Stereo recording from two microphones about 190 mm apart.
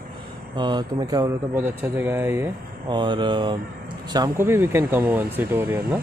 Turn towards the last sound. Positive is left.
turn(degrees=-10)  # may be behind; listen again after turning